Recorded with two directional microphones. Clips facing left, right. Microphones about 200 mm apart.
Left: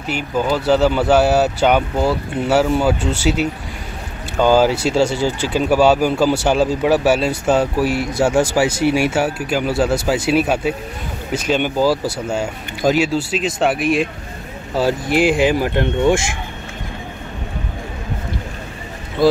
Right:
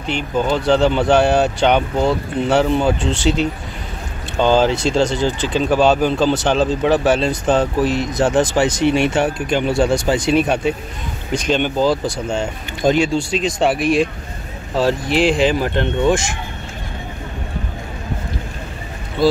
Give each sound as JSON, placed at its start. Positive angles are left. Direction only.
{"t": 0.0, "sound": "speech", "side_deg": 5}
{"t": 15.4, "sound": "speech", "side_deg": 5}